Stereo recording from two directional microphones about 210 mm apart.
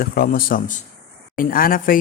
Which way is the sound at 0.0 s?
45° left (ahead or behind).